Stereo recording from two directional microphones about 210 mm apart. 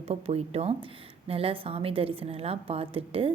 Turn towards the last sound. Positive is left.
turn(degrees=-25)  # may be behind; listen again after turning